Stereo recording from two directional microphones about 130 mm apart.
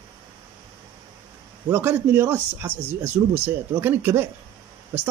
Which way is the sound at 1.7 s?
15° right (ahead or behind).